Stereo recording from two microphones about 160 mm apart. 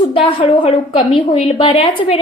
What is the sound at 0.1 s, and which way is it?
A woman's voice, 35° left (ahead or behind).